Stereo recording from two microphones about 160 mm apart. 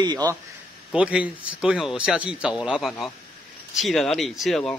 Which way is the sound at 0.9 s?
5° right (ahead or behind).